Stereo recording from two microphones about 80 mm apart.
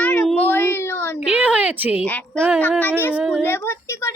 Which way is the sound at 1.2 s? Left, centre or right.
Centre.